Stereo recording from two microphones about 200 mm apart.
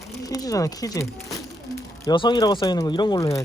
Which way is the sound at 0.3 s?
20° left (ahead or behind).